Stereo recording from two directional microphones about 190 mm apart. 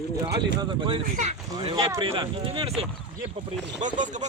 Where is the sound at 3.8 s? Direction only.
40° right (ahead or behind).